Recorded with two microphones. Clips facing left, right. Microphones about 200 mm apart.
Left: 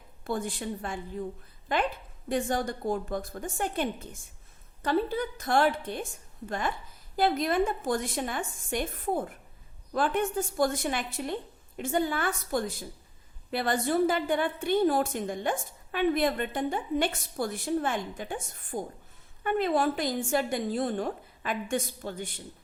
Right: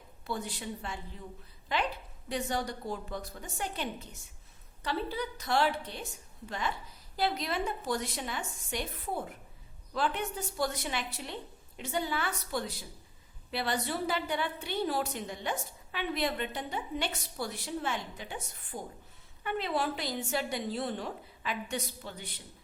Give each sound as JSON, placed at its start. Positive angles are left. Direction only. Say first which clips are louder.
{"t": 0.3, "sound": "a woman's voice", "louder": "left 5 dB", "side_deg": 50}